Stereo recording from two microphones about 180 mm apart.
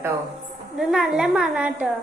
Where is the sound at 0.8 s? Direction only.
Centre (ahead or behind).